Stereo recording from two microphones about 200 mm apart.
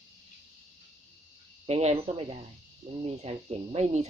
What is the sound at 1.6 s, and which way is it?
Speech, 35° right (ahead or behind).